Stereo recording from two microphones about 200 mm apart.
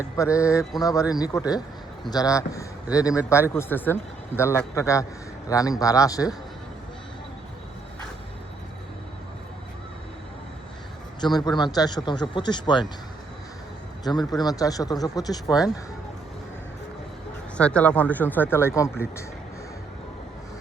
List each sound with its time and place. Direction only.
0.2 s speech: 15° left (ahead or behind)
11.2 s speech: 20° left (ahead or behind)
14.0 s speech: 20° left (ahead or behind)
17.6 s speech: 5° left (ahead or behind)